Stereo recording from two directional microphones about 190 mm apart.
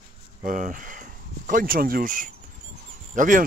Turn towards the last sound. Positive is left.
turn(degrees=-45)  # may be behind; listen again after turning